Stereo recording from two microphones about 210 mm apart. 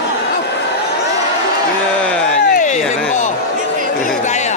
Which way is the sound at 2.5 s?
40° left (ahead or behind).